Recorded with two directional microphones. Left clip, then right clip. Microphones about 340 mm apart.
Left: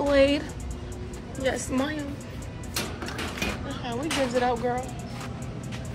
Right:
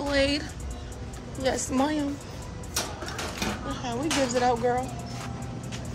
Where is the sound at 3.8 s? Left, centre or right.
Centre.